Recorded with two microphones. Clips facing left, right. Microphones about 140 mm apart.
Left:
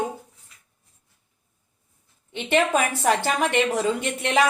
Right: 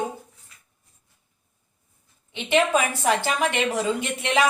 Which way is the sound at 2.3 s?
45° left (ahead or behind).